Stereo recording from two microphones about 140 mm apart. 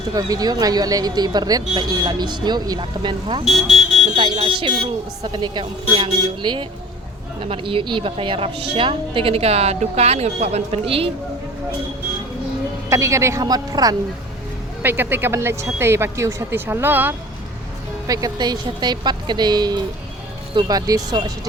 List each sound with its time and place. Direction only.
0.1 s speech: 25° right (ahead or behind)
3.4 s speech: centre (ahead or behind)
4.1 s a woman's voice: 40° right (ahead or behind)
12.9 s speech: 20° right (ahead or behind)
14.8 s speech: 15° right (ahead or behind)
18.1 s speech: 30° right (ahead or behind)